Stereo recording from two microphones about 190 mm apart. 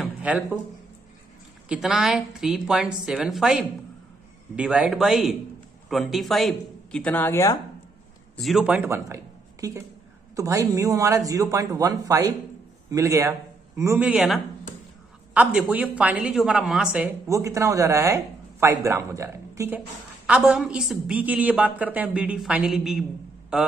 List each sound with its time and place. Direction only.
0.0 s a sound: 5° right (ahead or behind)
1.7 s a woman's voice: 5° right (ahead or behind); by 7.5 s 15° left (ahead or behind)
8.4 s a woman's voice: centre (ahead or behind)